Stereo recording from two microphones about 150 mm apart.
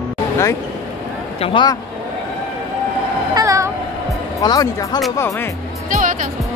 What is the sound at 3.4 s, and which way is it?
Meow, 20° right (ahead or behind).